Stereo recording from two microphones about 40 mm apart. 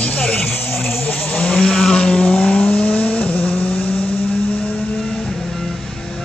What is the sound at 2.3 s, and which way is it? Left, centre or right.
Vehicle, left.